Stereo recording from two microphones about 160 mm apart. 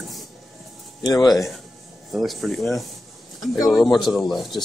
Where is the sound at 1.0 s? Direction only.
25° left (ahead or behind).